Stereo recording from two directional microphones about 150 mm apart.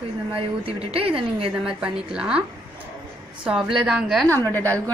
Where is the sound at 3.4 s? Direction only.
5° right (ahead or behind).